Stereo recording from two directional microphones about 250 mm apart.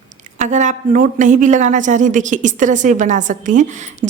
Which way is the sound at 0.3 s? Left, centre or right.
Right.